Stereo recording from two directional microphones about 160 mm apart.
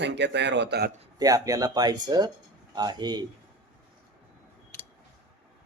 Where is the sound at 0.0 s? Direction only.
90° right.